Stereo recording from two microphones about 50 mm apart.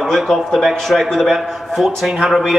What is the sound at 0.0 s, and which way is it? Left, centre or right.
A man's voice, centre.